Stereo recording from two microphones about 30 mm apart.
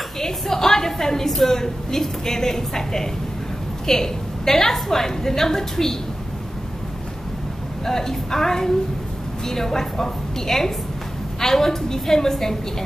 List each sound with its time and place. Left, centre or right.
0.2 s a woman's voice: centre
7.8 s a woman's voice: centre